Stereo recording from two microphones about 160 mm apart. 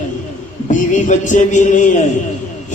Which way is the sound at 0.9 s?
50° left (ahead or behind).